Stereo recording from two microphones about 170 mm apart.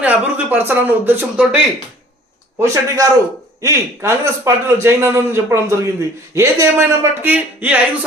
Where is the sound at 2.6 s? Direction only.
15° right (ahead or behind).